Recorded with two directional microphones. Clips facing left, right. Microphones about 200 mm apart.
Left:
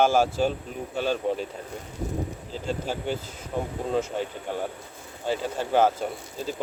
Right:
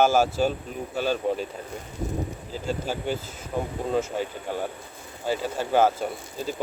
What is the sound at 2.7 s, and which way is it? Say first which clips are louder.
Speech: right 1 dB; 5° right (ahead or behind).